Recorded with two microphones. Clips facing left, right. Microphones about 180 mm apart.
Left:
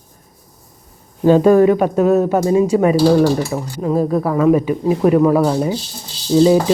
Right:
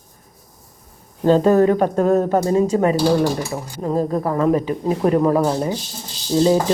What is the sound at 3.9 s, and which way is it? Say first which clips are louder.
Speech: left 3 dB; 10° left (ahead or behind).